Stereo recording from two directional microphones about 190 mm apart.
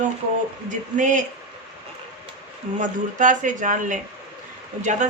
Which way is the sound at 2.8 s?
40° right (ahead or behind).